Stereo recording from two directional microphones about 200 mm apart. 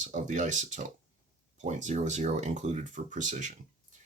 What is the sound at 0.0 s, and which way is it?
Speech, 40° right (ahead or behind).